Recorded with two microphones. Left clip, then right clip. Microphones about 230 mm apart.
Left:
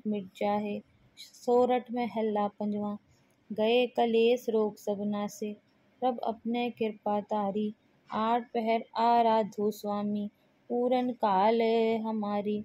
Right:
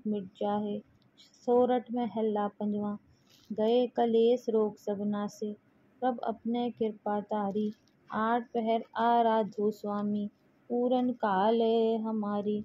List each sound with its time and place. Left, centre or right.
0.3 s speech: left